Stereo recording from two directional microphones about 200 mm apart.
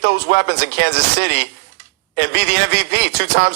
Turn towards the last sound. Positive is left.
turn(degrees=-55)  # may be behind; listen again after turning